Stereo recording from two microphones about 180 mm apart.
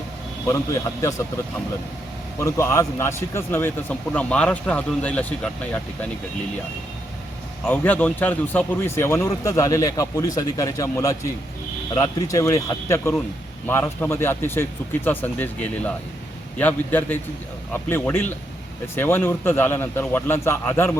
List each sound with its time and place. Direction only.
0.4 s a man's voice: 15° left (ahead or behind)
2.4 s a man's voice: 15° left (ahead or behind)
7.6 s a man's voice: 10° left (ahead or behind)